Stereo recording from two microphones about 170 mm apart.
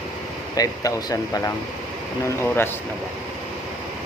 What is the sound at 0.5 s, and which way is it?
A man's voice, 20° left (ahead or behind).